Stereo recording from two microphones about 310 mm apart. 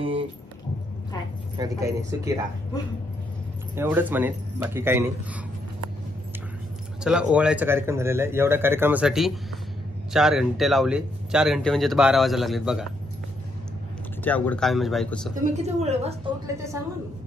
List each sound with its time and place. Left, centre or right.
1.6 s speech: centre
3.7 s speech: centre
7.0 s speech: centre
14.2 s speech: centre
15.3 s a woman's voice: right
16.5 s speech: centre